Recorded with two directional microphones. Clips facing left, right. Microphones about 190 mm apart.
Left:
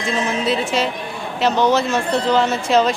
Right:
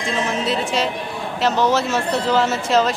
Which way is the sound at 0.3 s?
Centre (ahead or behind).